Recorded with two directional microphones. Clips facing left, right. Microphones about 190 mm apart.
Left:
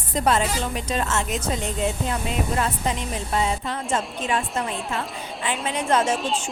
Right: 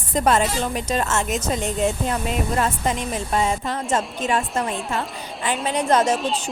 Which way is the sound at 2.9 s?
45° right (ahead or behind).